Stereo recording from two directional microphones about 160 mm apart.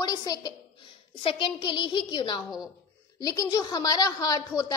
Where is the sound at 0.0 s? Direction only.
25° left (ahead or behind).